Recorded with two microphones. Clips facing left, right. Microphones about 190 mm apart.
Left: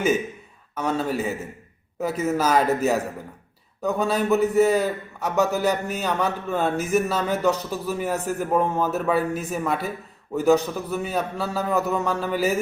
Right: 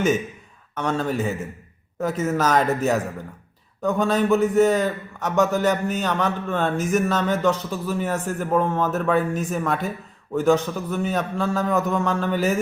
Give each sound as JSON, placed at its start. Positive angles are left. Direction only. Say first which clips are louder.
{"t": 0.8, "sound": "a man's voice", "louder": "right 1 dB", "side_deg": 5}